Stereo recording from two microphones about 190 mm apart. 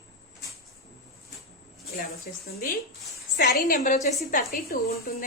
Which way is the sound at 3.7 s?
40° left (ahead or behind).